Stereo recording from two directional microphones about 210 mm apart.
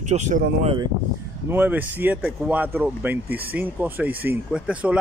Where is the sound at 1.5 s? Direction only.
10° right (ahead or behind).